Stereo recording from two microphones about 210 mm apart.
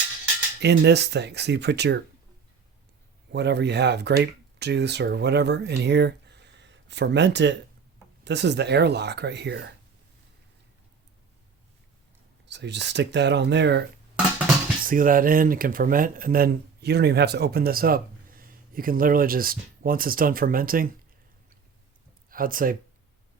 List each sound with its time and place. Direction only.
0.6 s speech: 55° right (ahead or behind)
3.3 s speech: 55° right (ahead or behind)
12.5 s speech: 55° right (ahead or behind)
14.8 s speech: 40° right (ahead or behind)
22.3 s speech: 40° right (ahead or behind)